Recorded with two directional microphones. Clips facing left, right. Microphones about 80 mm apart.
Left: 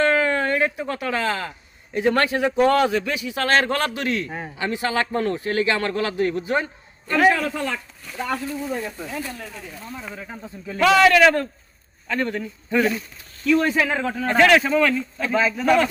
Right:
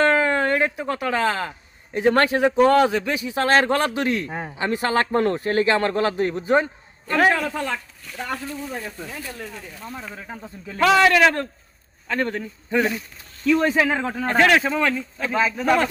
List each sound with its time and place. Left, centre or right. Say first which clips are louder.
0.0 s speech: right 1 dB; right
4.7 s a man's voice: right 3 dB; right
10.8 s a man's voice: even; right
11.0 s speech: left 3 dB; right
12.0 s a man's voice: even; right
15.3 s speech: left 1 dB; centre
15.5 s a man's voice: left 2 dB; right